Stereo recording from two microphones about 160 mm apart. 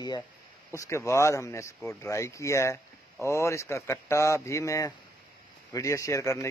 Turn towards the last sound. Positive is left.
turn(degrees=20)  # may be behind; listen again after turning